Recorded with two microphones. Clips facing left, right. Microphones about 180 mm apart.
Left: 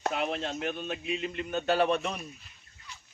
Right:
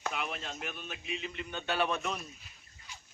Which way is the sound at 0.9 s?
60° left (ahead or behind).